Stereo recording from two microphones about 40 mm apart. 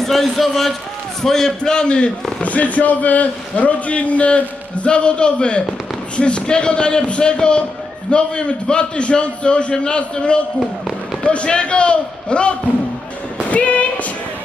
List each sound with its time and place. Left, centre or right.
0.0 s a man's voice: centre; by 2.1 s left
2.4 s a man's voice: left